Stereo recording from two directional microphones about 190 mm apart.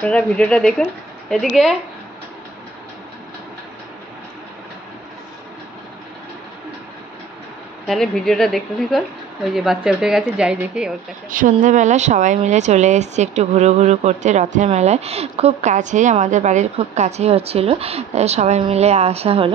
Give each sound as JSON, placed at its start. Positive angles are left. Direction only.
{"t": 0.0, "sound": "speech", "side_deg": 5}
{"t": 7.8, "sound": "speech", "side_deg": 0}
{"t": 11.2, "sound": "speech", "side_deg": -45}